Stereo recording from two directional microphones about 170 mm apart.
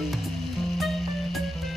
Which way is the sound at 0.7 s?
Centre (ahead or behind).